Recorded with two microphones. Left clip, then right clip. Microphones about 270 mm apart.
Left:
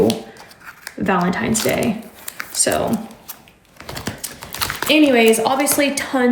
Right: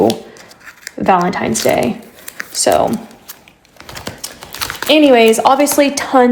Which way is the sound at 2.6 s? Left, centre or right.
Right.